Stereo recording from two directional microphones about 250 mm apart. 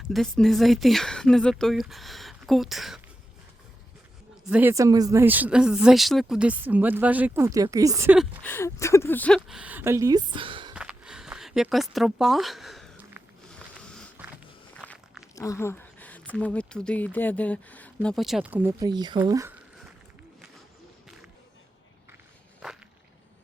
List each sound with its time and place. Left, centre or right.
0.1 s speech: centre
4.4 s speech: centre
8.4 s speech: centre
10.8 s a sound: centre
15.4 s a sound: centre
16.3 s speech: centre